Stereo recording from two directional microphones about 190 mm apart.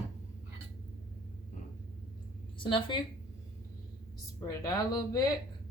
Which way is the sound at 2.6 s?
25° left (ahead or behind).